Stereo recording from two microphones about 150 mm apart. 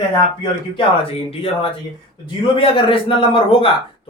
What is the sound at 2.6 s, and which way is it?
Speech, 35° left (ahead or behind).